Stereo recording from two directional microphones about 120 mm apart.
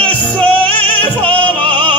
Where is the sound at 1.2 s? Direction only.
10° left (ahead or behind).